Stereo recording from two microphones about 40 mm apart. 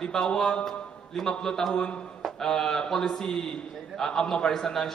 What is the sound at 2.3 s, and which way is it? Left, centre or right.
A man's voice, centre.